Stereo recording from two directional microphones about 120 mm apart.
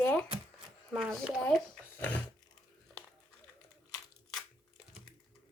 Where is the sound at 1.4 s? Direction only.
5° left (ahead or behind).